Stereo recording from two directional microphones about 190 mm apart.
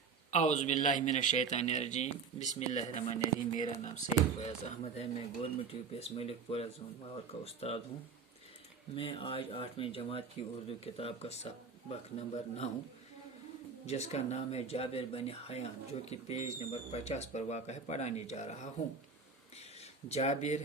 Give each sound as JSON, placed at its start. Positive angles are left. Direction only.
{"t": 0.3, "sound": "speech", "side_deg": 40}
{"t": 9.0, "sound": "speech", "side_deg": 30}
{"t": 13.8, "sound": "speech", "side_deg": 35}
{"t": 19.5, "sound": "a sound", "side_deg": 35}